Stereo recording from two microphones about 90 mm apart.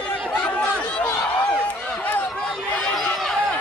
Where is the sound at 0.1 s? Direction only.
15° left (ahead or behind).